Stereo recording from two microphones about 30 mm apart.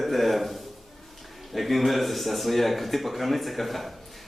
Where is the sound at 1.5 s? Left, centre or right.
Centre.